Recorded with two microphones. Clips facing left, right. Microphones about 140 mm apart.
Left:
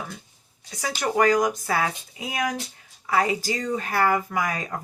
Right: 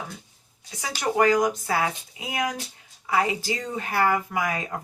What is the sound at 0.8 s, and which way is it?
Speech, 20° right (ahead or behind).